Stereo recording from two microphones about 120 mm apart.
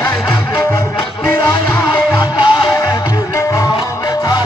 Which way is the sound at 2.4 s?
45° left (ahead or behind).